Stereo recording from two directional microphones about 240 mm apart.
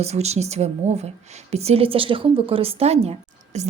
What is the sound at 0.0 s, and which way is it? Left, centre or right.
A woman's voice, right.